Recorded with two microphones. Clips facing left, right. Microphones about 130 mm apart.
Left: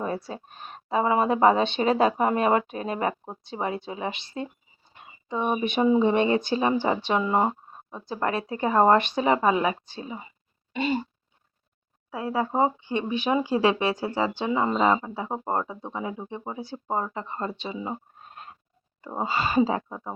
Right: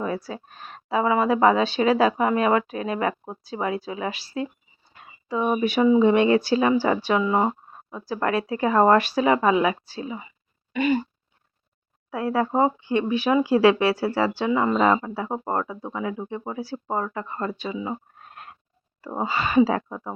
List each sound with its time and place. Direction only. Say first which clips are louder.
0.0 s speech: right 2 dB; 25° left (ahead or behind)
4.9 s a sound: right 3 dB; 20° left (ahead or behind)
6.0 s speech: right 4 dB; 25° left (ahead or behind)
10.1 s throat clearing: right 3 dB; 35° left (ahead or behind)
12.1 s speech: right 3 dB; 15° left (ahead or behind)
19.3 s speech: right 3 dB; 30° left (ahead or behind)